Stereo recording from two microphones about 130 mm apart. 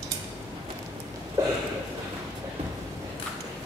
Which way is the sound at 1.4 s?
25° right (ahead or behind).